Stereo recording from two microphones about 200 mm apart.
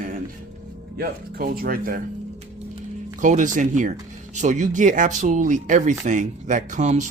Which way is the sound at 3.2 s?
40° right (ahead or behind).